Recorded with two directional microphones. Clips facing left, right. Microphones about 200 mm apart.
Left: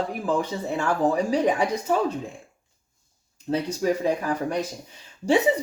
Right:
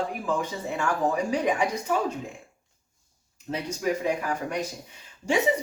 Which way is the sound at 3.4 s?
35° left (ahead or behind).